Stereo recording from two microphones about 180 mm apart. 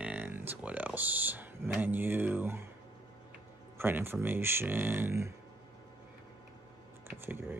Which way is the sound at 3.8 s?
10° right (ahead or behind).